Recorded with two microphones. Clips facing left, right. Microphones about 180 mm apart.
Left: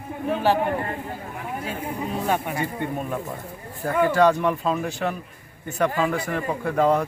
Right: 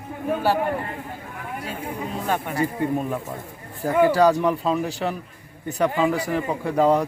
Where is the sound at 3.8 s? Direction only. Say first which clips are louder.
Right 3 dB; 15° right (ahead or behind).